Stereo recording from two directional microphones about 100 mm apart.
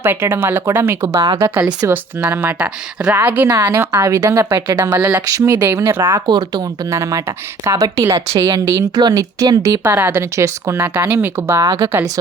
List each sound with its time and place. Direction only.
0.0 s a woman's voice: 25° right (ahead or behind); by 6.7 s 45° right (ahead or behind)
6.9 s a woman's voice: 30° right (ahead or behind)
9.8 s a woman's voice: 20° right (ahead or behind)
10.3 s a woman's voice: 30° right (ahead or behind)
11.6 s speech: 40° right (ahead or behind)